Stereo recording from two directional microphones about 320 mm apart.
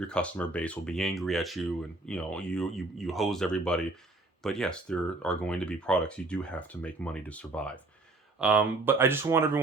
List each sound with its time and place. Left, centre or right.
0.1 s speech: centre